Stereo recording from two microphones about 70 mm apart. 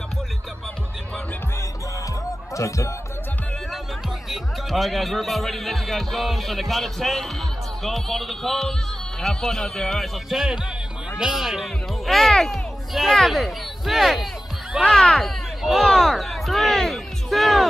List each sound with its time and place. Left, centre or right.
2.5 s speech: left
4.3 s a man's voice: centre
10.3 s a man's voice: centre